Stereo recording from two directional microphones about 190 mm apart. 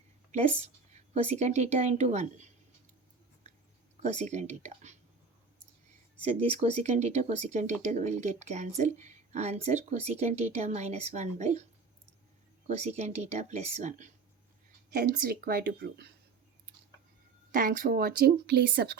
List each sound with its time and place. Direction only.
0.3 s speech: 35° right (ahead or behind)
4.0 s speech: 35° right (ahead or behind)
6.2 s speech: 35° right (ahead or behind)
12.6 s speech: 35° right (ahead or behind)
14.8 s speech: 50° right (ahead or behind)
17.5 s speech: 45° right (ahead or behind)